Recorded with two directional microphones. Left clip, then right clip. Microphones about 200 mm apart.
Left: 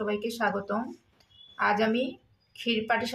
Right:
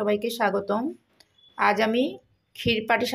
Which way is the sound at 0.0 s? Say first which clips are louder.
Right 5 dB; 35° right (ahead or behind).